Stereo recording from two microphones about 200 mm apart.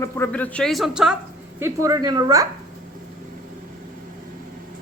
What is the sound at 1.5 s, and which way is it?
Speech, 15° right (ahead or behind).